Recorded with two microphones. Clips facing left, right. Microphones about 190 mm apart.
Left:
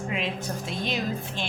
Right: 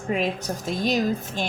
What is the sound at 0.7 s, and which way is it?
Speech, 40° right (ahead or behind).